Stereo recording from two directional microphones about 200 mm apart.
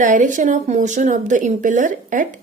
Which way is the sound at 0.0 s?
40° right (ahead or behind).